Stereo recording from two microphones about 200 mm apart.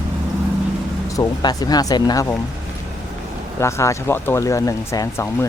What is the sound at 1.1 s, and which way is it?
Speech, 20° left (ahead or behind).